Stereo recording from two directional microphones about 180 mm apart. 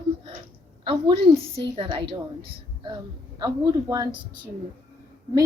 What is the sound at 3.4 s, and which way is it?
Speech, 20° right (ahead or behind).